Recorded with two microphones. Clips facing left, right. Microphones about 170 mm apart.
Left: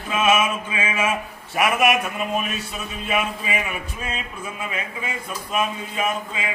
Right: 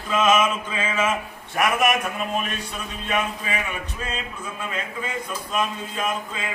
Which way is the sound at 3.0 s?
10° left (ahead or behind).